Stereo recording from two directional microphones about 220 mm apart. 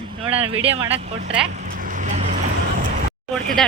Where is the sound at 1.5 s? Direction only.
35° right (ahead or behind).